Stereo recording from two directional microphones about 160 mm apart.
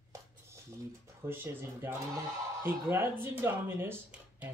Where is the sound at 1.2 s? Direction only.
15° right (ahead or behind).